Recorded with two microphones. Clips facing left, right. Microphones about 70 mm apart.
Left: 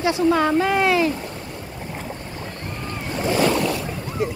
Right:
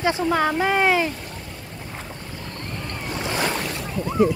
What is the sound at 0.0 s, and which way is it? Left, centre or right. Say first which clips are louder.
Speech: left 2 dB; right.